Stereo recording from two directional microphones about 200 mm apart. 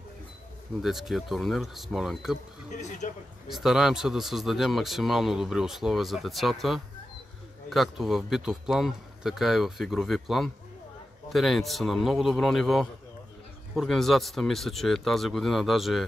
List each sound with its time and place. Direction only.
0.8 s speech: centre (ahead or behind)
2.7 s speech: 35° left (ahead or behind)
3.4 s speech: centre (ahead or behind)